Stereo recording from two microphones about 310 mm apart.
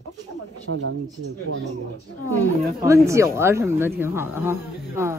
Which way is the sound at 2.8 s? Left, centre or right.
Centre.